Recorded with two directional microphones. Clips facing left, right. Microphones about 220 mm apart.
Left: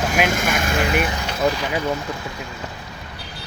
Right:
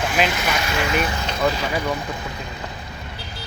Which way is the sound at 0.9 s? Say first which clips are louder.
Left 1 dB; 10° left (ahead or behind).